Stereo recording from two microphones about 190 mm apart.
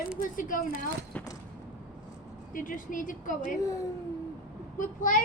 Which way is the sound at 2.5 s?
45° left (ahead or behind).